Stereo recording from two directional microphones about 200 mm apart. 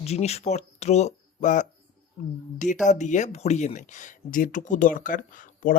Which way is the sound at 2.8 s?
35° left (ahead or behind).